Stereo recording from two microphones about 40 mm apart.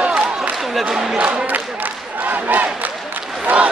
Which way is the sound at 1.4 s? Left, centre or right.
Right.